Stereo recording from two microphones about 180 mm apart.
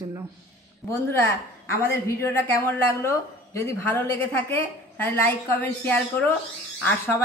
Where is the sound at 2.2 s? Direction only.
15° left (ahead or behind).